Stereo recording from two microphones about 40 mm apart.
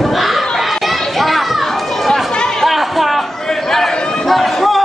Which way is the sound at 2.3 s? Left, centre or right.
Centre.